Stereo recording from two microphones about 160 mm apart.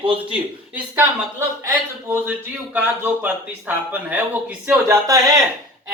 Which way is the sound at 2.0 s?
15° right (ahead or behind).